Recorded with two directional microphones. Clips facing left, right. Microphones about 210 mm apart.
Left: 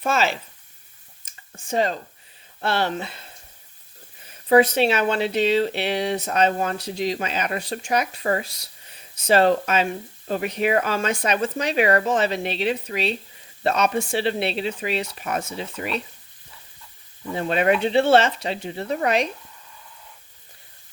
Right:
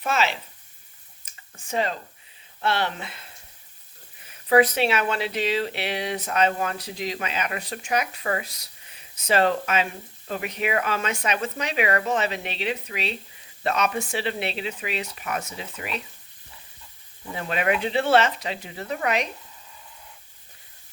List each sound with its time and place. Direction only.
0.0 s speech: 40° left (ahead or behind)
1.5 s speech: 30° left (ahead or behind)
4.3 s speech: 30° left (ahead or behind)
17.3 s speech: 30° left (ahead or behind)